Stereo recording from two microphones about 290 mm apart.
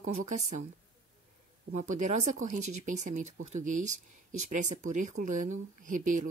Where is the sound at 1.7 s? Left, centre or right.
Right.